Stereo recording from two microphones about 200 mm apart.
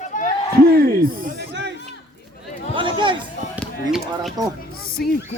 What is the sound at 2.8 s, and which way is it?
Chatter, 25° right (ahead or behind).